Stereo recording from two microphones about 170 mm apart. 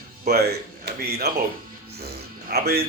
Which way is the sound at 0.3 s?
70° right (ahead or behind).